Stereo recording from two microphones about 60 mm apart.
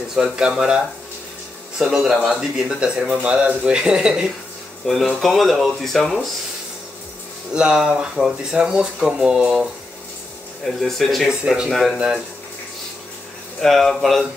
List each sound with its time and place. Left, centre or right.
0.1 s speech: centre
1.8 s speech: centre
4.8 s speech: centre
7.5 s speech: centre
10.6 s speech: centre
13.6 s speech: centre